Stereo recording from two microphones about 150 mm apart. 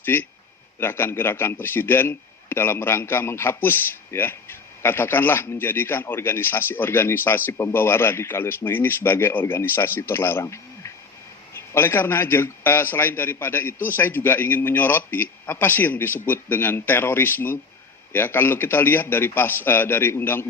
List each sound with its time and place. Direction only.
0.0 s a man's voice: 15° left (ahead or behind)